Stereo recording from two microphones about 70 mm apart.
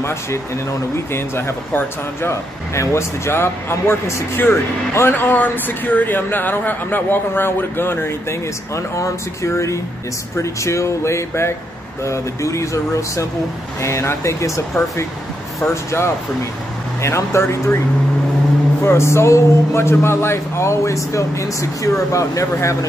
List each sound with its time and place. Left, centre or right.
0.0 s speech: left
2.7 s speech: left
5.1 s a man's voice: left
15.6 s speech: left
18.8 s a man's voice: left